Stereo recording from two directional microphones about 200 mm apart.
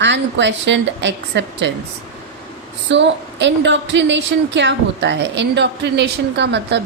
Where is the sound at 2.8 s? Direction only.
60° right (ahead or behind).